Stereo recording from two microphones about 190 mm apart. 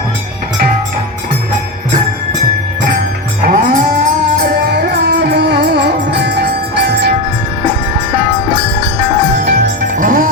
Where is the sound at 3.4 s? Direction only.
50° right (ahead or behind).